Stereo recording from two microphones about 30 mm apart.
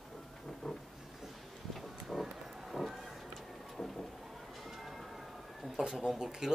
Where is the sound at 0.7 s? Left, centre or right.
Centre.